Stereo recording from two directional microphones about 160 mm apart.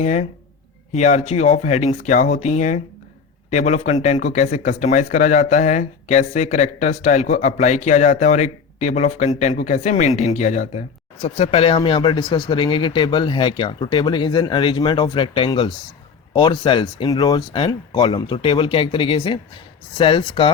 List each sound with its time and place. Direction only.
0.0 s speech: 45° left (ahead or behind)